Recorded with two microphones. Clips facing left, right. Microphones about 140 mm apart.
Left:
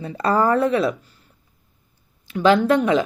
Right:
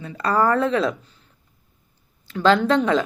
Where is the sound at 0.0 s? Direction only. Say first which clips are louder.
Left 1 dB; 30° left (ahead or behind); by 0.9 s 10° left (ahead or behind).